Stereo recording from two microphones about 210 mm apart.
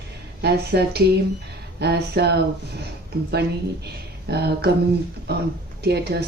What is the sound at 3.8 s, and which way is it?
Speech, 50° right (ahead or behind).